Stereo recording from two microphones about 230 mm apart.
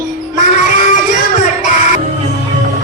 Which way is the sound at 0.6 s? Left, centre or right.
Left.